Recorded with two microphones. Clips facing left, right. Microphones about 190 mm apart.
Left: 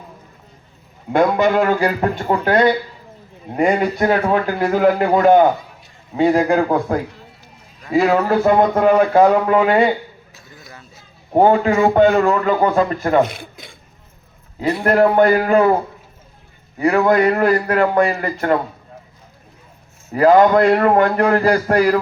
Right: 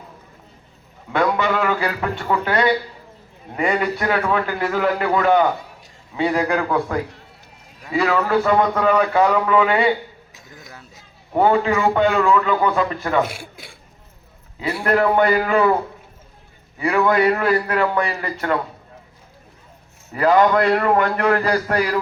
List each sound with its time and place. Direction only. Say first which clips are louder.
1.4 s a man's voice: left 5 dB; 45° left (ahead or behind)
11.3 s a man's voice: left 4 dB; 40° left (ahead or behind)
13.2 s speech: left 1 dB; 10° right (ahead or behind)
14.8 s a man's voice: left 4 dB; 45° left (ahead or behind)
16.7 s a man's voice: left 3 dB; 45° left (ahead or behind)
20.1 s a man's voice: left 4 dB; 40° left (ahead or behind)